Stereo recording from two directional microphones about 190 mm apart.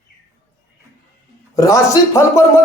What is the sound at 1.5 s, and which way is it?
Speech, 15° left (ahead or behind).